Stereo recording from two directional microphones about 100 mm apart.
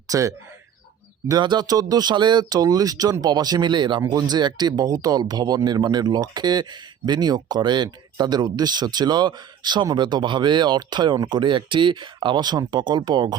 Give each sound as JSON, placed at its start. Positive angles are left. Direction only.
{"t": 0.1, "sound": "speech", "side_deg": -35}
{"t": 1.4, "sound": "speech", "side_deg": -45}
{"t": 4.0, "sound": "speech", "side_deg": -40}